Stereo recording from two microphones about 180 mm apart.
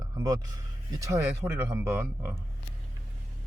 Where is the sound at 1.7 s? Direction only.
15° right (ahead or behind).